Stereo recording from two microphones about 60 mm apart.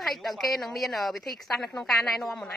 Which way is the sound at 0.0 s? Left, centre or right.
Centre.